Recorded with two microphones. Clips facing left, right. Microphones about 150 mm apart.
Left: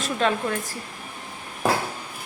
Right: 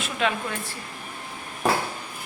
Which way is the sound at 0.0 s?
40° left (ahead or behind).